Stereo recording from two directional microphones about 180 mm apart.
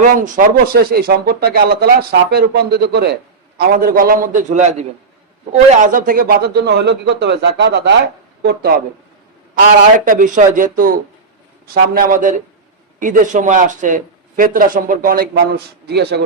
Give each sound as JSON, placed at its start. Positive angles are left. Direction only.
{"t": 0.0, "sound": "speech", "side_deg": -45}
{"t": 3.6, "sound": "a man's voice", "side_deg": -55}
{"t": 8.4, "sound": "speech", "side_deg": -60}
{"t": 10.1, "sound": "speech", "side_deg": -45}